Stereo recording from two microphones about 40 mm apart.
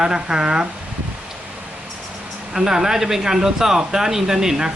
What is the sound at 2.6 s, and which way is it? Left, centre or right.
A man's voice, centre.